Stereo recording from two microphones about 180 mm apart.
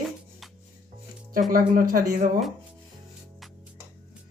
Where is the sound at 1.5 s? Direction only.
50° right (ahead or behind).